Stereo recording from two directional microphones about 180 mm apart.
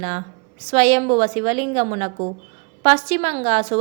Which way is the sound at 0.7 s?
35° right (ahead or behind).